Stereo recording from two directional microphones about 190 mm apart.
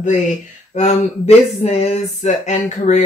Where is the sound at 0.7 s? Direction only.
35° left (ahead or behind).